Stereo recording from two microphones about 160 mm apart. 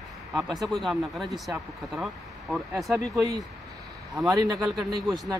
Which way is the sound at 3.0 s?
20° right (ahead or behind).